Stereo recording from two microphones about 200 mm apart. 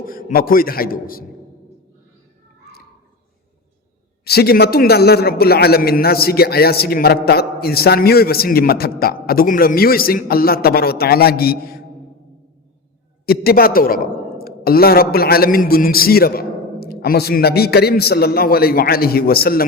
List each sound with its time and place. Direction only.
0.0 s a man's voice: 45° left (ahead or behind)
4.2 s a man's voice: 50° left (ahead or behind)
13.2 s a man's voice: 50° left (ahead or behind)